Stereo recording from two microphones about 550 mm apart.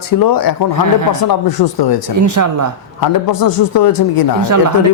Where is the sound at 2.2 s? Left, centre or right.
Right.